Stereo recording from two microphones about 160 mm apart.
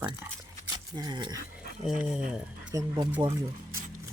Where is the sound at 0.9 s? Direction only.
25° right (ahead or behind).